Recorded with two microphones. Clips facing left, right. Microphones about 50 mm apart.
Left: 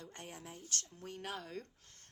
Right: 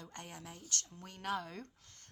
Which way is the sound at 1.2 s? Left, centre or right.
Centre.